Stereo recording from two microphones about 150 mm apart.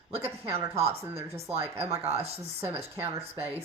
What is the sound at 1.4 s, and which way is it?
Speech, 15° right (ahead or behind).